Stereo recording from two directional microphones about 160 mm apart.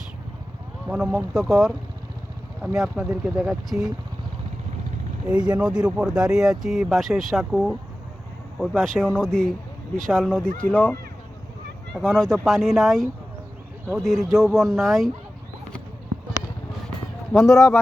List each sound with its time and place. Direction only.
0.9 s speech: 5° right (ahead or behind)
5.5 s speech: 5° right (ahead or behind)
11.9 s speech: 5° left (ahead or behind)
17.5 s speech: 15° left (ahead or behind)